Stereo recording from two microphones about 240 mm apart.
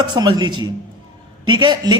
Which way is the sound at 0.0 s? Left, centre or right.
Centre.